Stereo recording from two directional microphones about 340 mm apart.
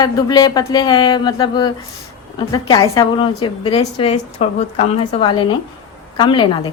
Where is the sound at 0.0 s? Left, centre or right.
Centre.